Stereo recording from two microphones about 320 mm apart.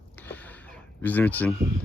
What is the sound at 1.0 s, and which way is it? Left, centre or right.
Speech, centre.